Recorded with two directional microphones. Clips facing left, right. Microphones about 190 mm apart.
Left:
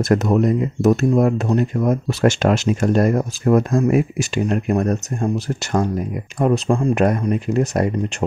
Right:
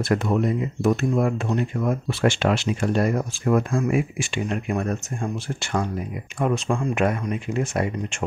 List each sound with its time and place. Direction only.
0.0 s speech: 40° left (ahead or behind)